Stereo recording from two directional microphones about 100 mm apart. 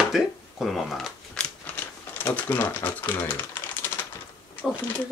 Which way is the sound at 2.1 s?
20° left (ahead or behind).